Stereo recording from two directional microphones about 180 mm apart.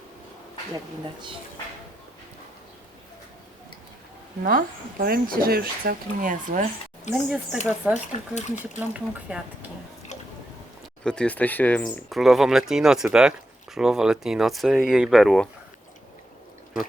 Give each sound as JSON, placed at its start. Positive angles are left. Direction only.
{"t": 4.4, "sound": "speech", "side_deg": -50}
{"t": 7.1, "sound": "speech", "side_deg": -5}
{"t": 8.4, "sound": "speech", "side_deg": 40}
{"t": 8.9, "sound": "speech", "side_deg": -5}
{"t": 11.0, "sound": "speech", "side_deg": 5}